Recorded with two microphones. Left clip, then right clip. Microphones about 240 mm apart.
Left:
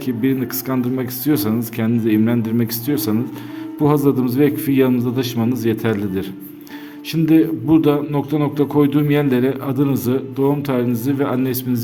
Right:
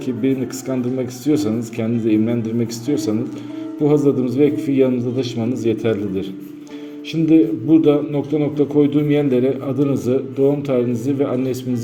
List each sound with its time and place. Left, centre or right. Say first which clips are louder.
0.0 s a man's voice: even; left